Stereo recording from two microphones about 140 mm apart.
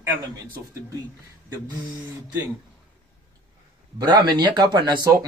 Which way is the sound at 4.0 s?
30° right (ahead or behind).